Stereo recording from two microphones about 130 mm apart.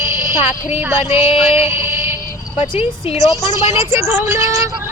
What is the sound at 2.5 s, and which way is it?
Speech, 45° left (ahead or behind).